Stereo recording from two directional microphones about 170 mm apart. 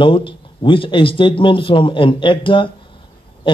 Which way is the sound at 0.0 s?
30° left (ahead or behind).